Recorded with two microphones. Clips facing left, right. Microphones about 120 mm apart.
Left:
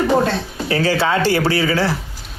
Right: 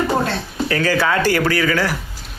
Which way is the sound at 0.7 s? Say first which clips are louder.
Left 1 dB; 25° left (ahead or behind).